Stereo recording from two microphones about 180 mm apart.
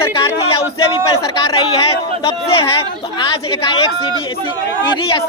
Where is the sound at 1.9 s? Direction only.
30° left (ahead or behind).